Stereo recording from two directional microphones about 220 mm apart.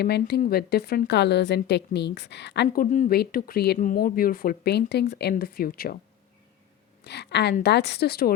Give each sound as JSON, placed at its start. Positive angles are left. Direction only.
{"t": 0.0, "sound": "a woman's voice", "side_deg": 45}
{"t": 7.0, "sound": "a woman's voice", "side_deg": 50}